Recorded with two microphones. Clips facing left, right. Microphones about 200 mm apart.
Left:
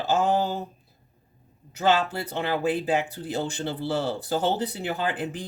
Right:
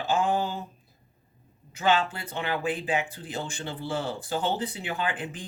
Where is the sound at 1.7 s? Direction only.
40° left (ahead or behind).